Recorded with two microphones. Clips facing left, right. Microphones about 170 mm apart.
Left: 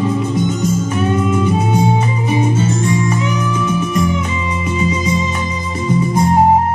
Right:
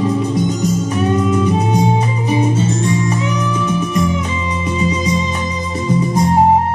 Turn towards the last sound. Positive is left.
turn(degrees=-35)  # may be behind; listen again after turning